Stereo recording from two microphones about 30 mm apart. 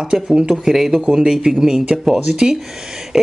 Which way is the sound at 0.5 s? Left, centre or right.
Centre.